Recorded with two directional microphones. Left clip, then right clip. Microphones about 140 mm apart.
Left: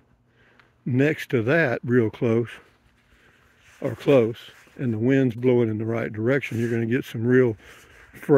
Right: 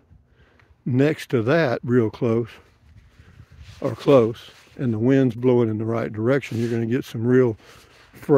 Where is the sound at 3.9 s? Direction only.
35° right (ahead or behind).